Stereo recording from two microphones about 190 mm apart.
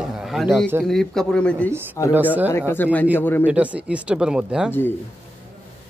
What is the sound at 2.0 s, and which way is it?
Speech, 15° left (ahead or behind).